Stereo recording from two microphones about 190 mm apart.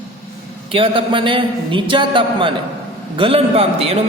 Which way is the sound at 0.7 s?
25° right (ahead or behind).